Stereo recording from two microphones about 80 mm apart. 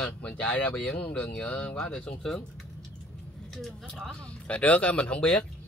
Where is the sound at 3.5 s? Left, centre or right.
Centre.